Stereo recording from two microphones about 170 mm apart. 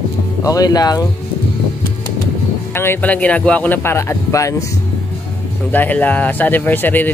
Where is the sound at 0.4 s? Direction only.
20° left (ahead or behind).